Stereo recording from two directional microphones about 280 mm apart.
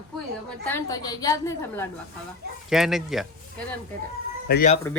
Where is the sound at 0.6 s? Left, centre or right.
Centre.